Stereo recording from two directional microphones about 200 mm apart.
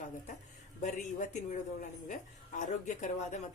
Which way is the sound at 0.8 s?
35° left (ahead or behind).